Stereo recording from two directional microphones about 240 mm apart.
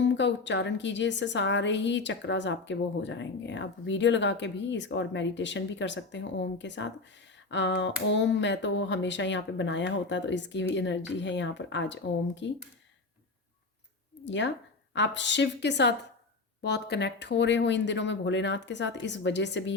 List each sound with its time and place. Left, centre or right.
0.0 s a woman's voice: left
14.3 s a woman's voice: left